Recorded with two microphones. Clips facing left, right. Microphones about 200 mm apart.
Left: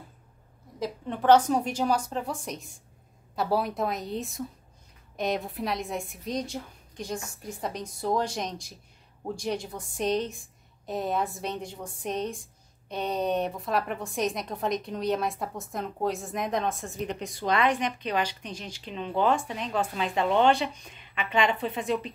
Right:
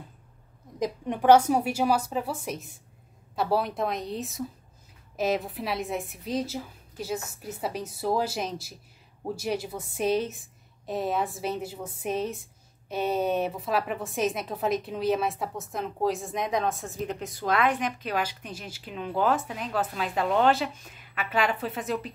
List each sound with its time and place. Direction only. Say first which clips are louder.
0.7 s a woman's voice: right 3 dB; 15° right (ahead or behind)